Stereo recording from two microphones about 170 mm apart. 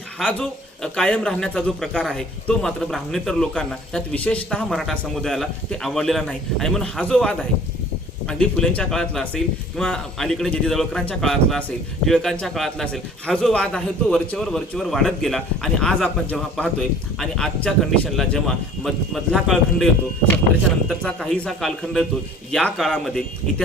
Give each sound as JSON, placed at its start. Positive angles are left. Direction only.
{"t": 0.2, "sound": "a man's voice", "side_deg": 5}